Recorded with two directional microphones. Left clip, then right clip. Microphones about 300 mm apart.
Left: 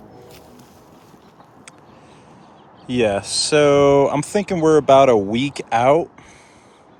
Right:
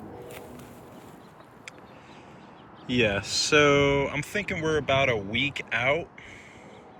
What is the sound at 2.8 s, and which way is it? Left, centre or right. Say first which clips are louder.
Speech: left 6 dB; centre.